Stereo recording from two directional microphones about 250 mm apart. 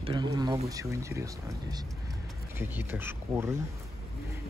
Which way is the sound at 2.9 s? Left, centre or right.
Centre.